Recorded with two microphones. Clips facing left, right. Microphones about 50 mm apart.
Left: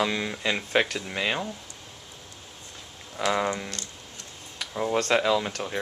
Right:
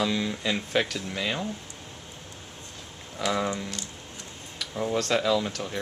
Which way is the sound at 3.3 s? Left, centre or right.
Centre.